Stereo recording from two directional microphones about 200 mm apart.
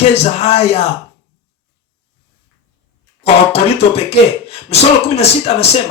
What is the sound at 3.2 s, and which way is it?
Speech, 30° left (ahead or behind).